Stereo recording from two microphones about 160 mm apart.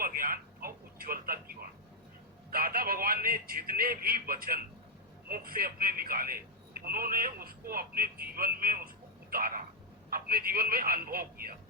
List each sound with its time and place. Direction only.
0.0 s radio: 60° right (ahead or behind)
2.5 s a man's voice: 65° right (ahead or behind)